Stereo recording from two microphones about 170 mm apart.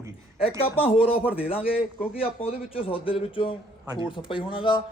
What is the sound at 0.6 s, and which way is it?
A man's voice, 35° left (ahead or behind).